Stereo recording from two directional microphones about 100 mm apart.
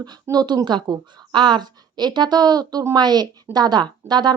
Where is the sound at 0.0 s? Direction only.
40° right (ahead or behind).